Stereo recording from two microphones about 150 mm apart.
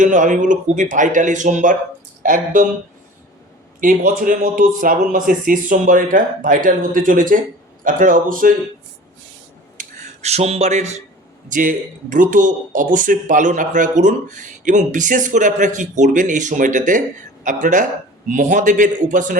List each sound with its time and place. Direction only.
0.0 s speech: 60° right (ahead or behind)
3.8 s speech: 65° right (ahead or behind)
9.7 s a sound: 45° right (ahead or behind)
11.4 s speech: 60° right (ahead or behind)